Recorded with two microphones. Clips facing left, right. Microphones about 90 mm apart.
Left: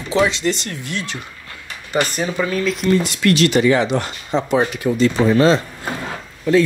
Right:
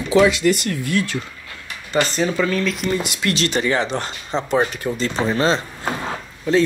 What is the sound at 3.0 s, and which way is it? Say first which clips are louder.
Speech: left 6 dB; 25° right (ahead or behind).